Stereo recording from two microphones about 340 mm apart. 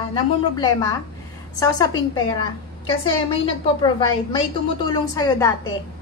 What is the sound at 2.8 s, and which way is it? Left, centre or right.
A woman's voice, centre.